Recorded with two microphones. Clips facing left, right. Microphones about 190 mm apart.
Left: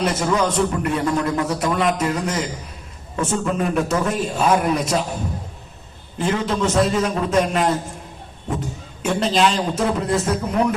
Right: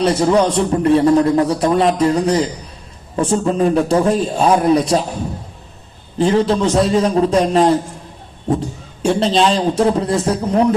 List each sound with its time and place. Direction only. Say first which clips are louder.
0.0 s a man's voice: right 6 dB; 30° right (ahead or behind)
6.1 s a man's voice: right 7 dB; 30° right (ahead or behind)
9.0 s a man's voice: right 4 dB; 30° right (ahead or behind)